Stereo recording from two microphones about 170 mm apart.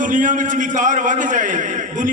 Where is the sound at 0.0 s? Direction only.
50° right (ahead or behind).